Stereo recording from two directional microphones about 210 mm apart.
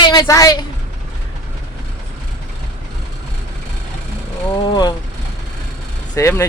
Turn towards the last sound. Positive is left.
turn(degrees=15)  # may be behind; listen again after turning